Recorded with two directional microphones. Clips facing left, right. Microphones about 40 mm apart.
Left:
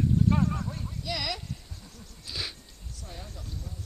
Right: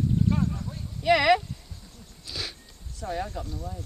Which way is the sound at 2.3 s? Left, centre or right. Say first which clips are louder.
Right 1 dB; centre.